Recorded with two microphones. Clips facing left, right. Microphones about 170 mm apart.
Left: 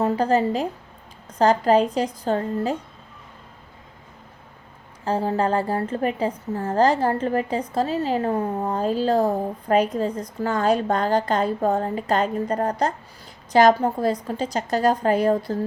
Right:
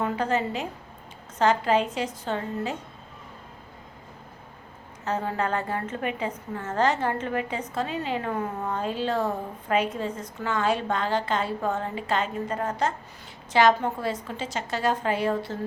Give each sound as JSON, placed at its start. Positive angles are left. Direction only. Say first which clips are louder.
{"t": 0.0, "sound": "a woman's voice", "louder": "left 6 dB", "side_deg": 30}
{"t": 5.0, "sound": "a woman's voice", "louder": "left 5 dB", "side_deg": 30}